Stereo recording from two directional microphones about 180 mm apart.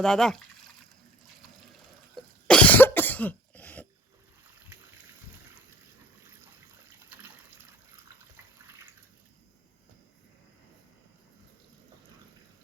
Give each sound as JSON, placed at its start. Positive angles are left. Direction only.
{"t": 0.0, "sound": "speech", "side_deg": 5}
{"t": 2.1, "sound": "cough", "side_deg": 5}